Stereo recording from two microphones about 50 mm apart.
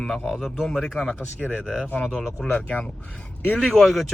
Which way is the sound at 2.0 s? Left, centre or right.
Centre.